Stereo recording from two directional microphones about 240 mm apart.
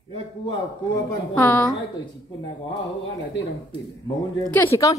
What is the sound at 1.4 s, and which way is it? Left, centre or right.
Speech, centre.